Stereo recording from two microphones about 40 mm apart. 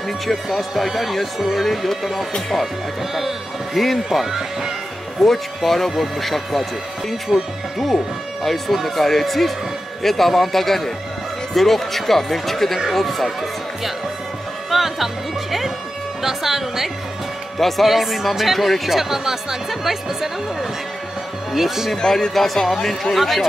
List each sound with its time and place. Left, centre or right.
0.3 s speech: centre
3.7 s speech: centre
5.2 s speech: centre
7.3 s speech: centre
8.5 s speech: centre
14.7 s music: centre
16.2 s a woman's voice: centre
21.5 s speech: centre
21.9 s speech: centre
22.3 s speech: centre